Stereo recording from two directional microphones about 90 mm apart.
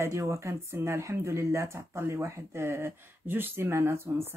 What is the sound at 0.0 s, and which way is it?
Speech, 35° right (ahead or behind).